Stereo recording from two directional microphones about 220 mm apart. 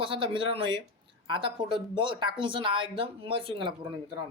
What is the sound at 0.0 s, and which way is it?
Speech, 25° right (ahead or behind).